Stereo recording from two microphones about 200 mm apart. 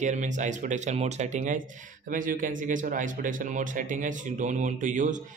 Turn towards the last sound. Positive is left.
turn(degrees=-40)  # may be behind; listen again after turning